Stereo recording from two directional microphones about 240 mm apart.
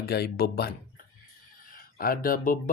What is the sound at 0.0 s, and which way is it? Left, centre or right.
Speech, left.